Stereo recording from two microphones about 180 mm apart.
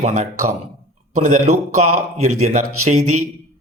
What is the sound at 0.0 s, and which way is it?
A man's voice, 40° right (ahead or behind).